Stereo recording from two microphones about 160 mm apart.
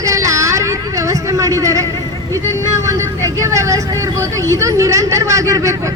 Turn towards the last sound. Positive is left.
turn(degrees=-20)  # may be behind; listen again after turning